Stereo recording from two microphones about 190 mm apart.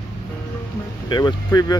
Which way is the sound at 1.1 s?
20° left (ahead or behind).